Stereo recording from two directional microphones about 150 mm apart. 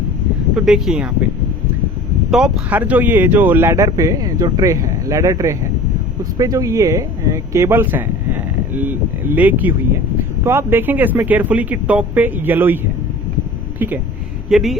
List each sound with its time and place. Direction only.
0.5 s speech: 5° right (ahead or behind)
2.3 s speech: 5° right (ahead or behind)
14.5 s speech: centre (ahead or behind)